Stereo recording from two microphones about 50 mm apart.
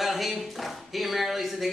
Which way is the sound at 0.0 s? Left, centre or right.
Centre.